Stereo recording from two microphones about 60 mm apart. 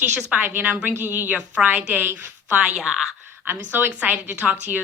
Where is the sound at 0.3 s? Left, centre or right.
Right.